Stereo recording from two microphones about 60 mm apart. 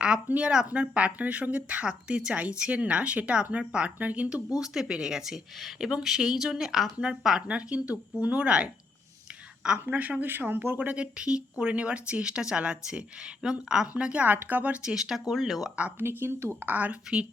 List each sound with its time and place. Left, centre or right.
0.3 s speech: centre
4.6 s speech: centre
7.4 s speech: centre
9.8 s speech: right
13.8 s speech: right
14.8 s speech: centre
16.0 s speech: right